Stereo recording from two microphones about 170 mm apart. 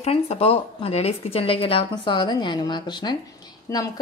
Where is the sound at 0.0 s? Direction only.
35° left (ahead or behind).